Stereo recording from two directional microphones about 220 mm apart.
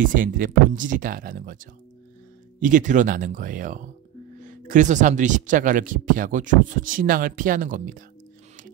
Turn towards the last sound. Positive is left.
turn(degrees=-40)  # may be behind; listen again after turning